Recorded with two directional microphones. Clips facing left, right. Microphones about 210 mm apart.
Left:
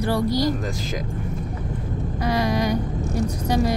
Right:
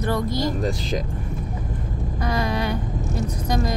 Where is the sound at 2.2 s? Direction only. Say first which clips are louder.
Left 3 dB; 10° left (ahead or behind).